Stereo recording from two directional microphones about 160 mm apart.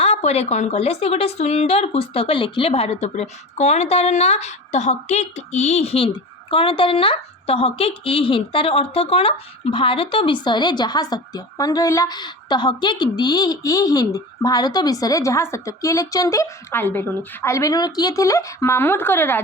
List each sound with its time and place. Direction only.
0.0 s a woman's voice: 40° left (ahead or behind); by 19.4 s 15° left (ahead or behind)